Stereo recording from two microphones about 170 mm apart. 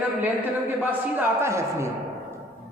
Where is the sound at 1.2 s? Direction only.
15° right (ahead or behind).